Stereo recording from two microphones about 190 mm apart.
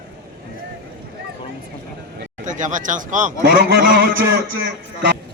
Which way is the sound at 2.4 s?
40° right (ahead or behind).